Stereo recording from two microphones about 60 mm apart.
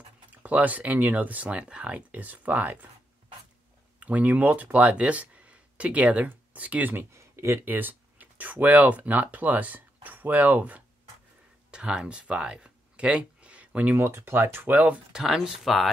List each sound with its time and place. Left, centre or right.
0.3 s speech: right
4.0 s speech: right
7.1 s speech: right
7.6 s speech: right
11.7 s speech: centre
13.9 s speech: right
15.1 s speech: centre